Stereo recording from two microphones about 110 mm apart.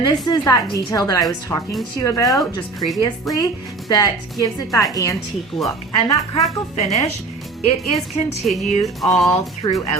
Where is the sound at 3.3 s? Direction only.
Centre (ahead or behind).